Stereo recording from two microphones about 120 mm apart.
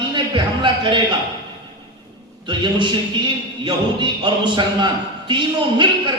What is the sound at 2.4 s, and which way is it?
A man's voice, 40° right (ahead or behind).